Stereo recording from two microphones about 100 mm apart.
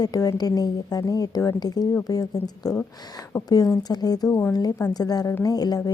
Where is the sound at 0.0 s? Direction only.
40° left (ahead or behind).